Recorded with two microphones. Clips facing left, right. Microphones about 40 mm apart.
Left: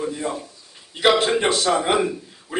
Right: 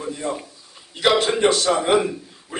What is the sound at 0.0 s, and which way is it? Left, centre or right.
A man's voice, centre.